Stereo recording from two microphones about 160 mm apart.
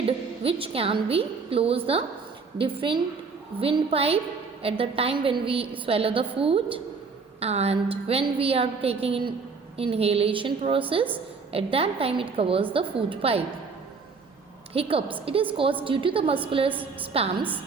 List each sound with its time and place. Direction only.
0.4 s a woman's voice: 35° right (ahead or behind)
14.7 s a woman's voice: 35° right (ahead or behind)